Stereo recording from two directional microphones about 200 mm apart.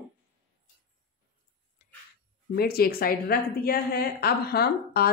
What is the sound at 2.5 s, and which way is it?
A woman's voice, 50° left (ahead or behind).